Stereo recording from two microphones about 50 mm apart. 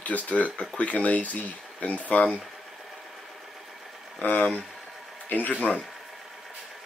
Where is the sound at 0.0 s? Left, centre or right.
Left.